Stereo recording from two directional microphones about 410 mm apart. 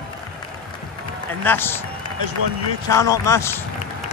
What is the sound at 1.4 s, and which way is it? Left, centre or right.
Speech, centre.